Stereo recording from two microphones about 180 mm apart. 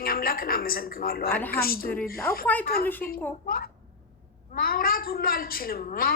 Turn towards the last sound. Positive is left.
turn(degrees=55)  # may be behind; listen again after turning